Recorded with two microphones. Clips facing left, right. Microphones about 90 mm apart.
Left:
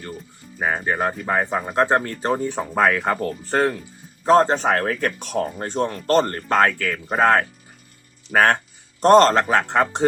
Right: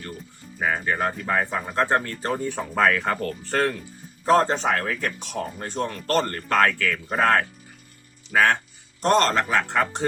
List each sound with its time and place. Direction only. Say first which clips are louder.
0.6 s speech: left 2 dB; 25° left (ahead or behind)
4.3 s speech: left 4 dB; 30° left (ahead or behind)
4.5 s speech: left 4 dB; 45° left (ahead or behind); by 7.4 s 25° left (ahead or behind)
8.3 s speech: left 3 dB; 45° left (ahead or behind); by 10.1 s 30° left (ahead or behind)